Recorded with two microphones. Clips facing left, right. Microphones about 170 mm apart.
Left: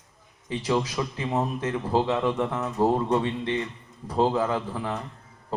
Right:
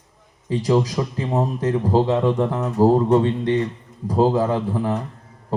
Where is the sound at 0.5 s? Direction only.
40° right (ahead or behind).